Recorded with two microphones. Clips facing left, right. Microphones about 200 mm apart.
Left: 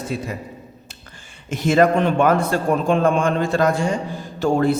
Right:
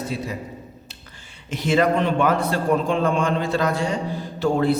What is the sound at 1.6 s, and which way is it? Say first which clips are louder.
A man's voice: left 3 dB; 45° left (ahead or behind).